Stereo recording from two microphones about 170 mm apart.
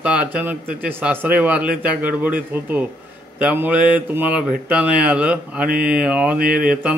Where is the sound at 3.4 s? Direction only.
10° right (ahead or behind).